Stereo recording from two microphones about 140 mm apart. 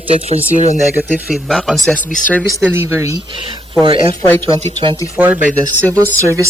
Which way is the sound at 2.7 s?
20° right (ahead or behind).